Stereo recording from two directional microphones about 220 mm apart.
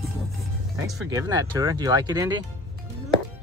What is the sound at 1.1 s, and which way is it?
Speech, 15° right (ahead or behind).